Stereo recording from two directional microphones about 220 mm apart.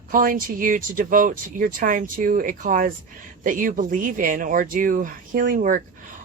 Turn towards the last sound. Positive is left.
turn(degrees=-35)  # may be behind; listen again after turning